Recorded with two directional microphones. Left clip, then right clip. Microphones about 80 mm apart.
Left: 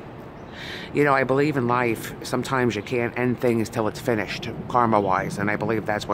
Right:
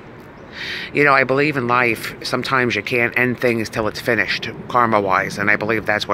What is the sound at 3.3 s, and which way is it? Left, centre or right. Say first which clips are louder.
Speech: right 4 dB; centre.